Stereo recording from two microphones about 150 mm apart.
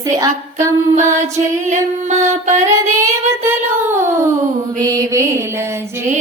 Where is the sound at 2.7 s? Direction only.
20° right (ahead or behind).